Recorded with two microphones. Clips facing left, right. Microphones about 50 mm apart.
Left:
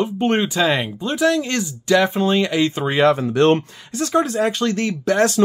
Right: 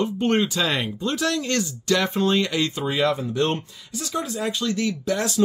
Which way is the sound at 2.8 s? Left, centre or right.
Left.